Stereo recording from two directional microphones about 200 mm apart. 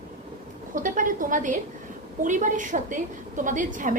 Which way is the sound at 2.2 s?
40° right (ahead or behind).